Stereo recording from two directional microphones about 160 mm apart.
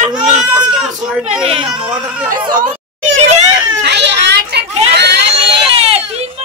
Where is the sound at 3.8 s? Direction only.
90° right.